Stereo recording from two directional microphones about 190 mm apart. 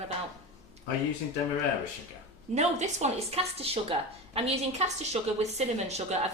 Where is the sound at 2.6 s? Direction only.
35° right (ahead or behind).